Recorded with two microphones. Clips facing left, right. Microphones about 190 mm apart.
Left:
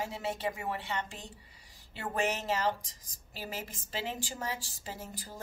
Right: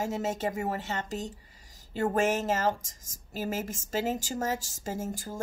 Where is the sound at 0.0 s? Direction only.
45° right (ahead or behind).